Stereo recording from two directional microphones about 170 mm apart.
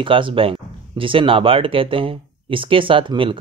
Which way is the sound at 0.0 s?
30° right (ahead or behind).